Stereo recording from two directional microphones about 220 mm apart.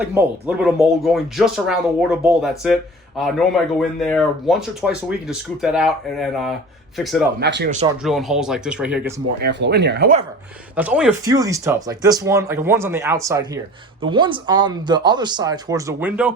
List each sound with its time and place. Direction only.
0.1 s speech: 5° right (ahead or behind)
7.3 s speech: 50° right (ahead or behind)
8.0 s speech: centre (ahead or behind)
9.4 s speech: 50° right (ahead or behind)
10.8 s speech: 5° right (ahead or behind)